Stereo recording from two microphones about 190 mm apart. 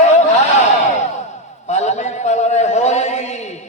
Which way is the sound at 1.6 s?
35° left (ahead or behind).